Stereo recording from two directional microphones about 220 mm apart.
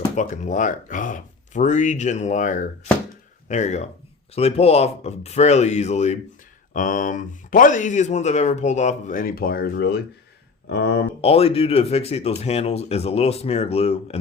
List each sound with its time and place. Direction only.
0.2 s speech: 35° left (ahead or behind)
11.2 s speech: 25° left (ahead or behind)